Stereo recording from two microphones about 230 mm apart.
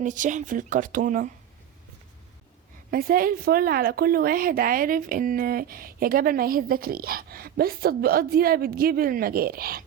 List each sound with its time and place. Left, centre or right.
0.0 s a woman's voice: right
2.9 s a woman's voice: right